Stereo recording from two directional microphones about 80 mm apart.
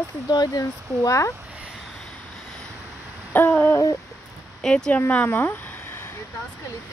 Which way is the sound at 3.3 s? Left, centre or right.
Left.